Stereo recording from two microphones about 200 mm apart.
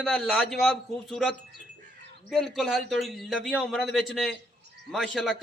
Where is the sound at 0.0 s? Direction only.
Centre (ahead or behind).